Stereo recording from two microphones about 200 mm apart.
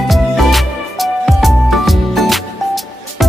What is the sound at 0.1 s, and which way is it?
Music, centre (ahead or behind).